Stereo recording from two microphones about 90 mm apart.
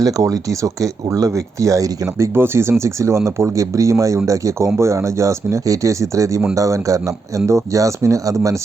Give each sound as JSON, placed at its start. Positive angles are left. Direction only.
{"t": 0.0, "sound": "speech", "side_deg": -40}